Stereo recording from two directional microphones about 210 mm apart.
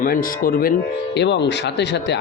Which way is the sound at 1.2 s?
55° left (ahead or behind).